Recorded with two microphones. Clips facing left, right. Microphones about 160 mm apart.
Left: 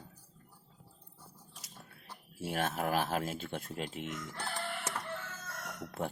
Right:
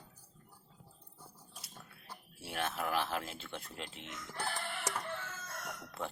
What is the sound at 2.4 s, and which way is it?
Speech, 45° left (ahead or behind).